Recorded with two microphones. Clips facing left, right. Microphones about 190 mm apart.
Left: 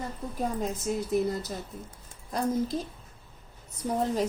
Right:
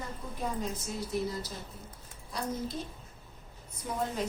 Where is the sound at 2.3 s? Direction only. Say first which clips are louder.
Left 7 dB; 45° left (ahead or behind).